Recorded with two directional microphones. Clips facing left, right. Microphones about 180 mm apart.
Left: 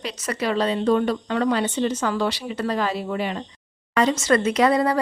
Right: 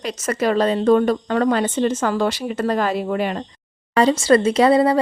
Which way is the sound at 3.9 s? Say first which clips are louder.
Right 5 dB; 30° right (ahead or behind).